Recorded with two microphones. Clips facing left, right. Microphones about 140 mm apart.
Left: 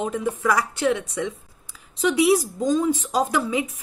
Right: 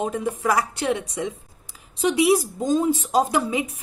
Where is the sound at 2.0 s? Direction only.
20° right (ahead or behind).